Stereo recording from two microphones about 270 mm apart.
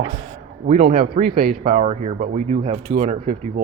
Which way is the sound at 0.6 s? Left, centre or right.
Right.